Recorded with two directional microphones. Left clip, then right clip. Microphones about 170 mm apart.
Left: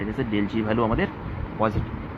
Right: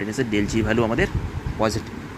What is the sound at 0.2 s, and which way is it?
Speech, 25° right (ahead or behind).